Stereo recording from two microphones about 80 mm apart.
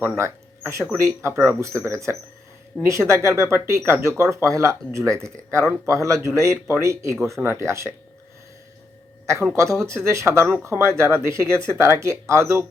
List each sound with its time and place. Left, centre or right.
0.2 s speech: right
9.2 s speech: right